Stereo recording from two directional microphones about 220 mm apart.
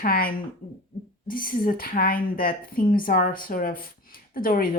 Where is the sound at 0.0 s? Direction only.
40° left (ahead or behind).